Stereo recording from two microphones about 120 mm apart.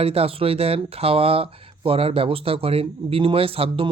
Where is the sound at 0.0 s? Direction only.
55° right (ahead or behind).